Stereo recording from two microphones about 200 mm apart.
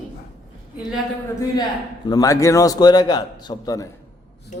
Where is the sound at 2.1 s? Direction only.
15° left (ahead or behind).